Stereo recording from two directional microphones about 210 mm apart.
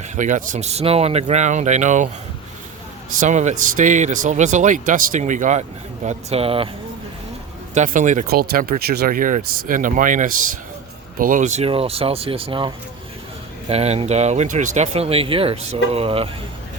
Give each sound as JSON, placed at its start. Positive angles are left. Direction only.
{"t": 0.2, "sound": "speech", "side_deg": -35}
{"t": 3.2, "sound": "speech", "side_deg": -35}
{"t": 7.7, "sound": "speech", "side_deg": -35}